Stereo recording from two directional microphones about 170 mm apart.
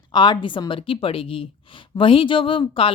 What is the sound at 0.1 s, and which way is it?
A woman's voice, 25° left (ahead or behind).